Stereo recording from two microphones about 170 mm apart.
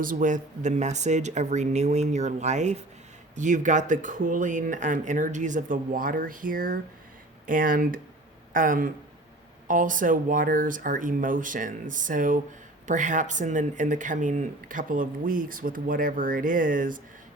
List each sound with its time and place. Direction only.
0.0 s speech: 50° right (ahead or behind)